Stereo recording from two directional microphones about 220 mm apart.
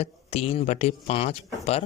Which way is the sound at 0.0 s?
30° left (ahead or behind).